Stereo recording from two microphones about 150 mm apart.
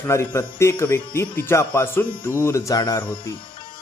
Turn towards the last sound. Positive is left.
turn(degrees=20)  # may be behind; listen again after turning